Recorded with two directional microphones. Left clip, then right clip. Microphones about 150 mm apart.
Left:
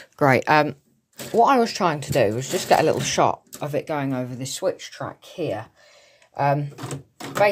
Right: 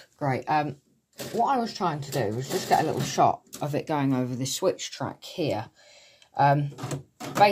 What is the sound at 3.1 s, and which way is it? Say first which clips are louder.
Speech: left 2 dB; 25° left (ahead or behind).